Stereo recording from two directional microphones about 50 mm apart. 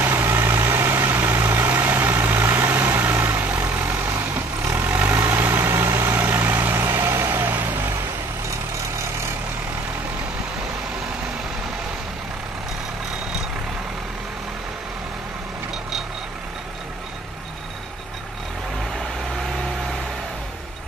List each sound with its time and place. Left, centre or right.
0.0 s vehicle: right
4.6 s vehicle: right
4.8 s vehicle: right
5.1 s vehicle: right
6.2 s vehicle: right